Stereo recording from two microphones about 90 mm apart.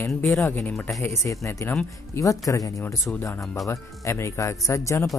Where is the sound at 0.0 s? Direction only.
30° left (ahead or behind).